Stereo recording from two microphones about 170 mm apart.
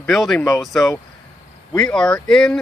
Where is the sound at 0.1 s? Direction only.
5° left (ahead or behind).